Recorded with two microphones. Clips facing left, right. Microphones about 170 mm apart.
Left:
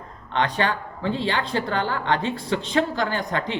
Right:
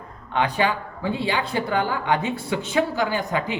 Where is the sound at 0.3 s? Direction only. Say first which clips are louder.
Right 1 dB; 10° right (ahead or behind).